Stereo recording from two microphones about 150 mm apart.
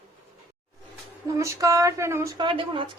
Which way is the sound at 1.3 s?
20° right (ahead or behind).